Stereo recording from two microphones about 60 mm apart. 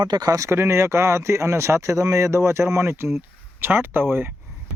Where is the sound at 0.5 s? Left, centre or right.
Right.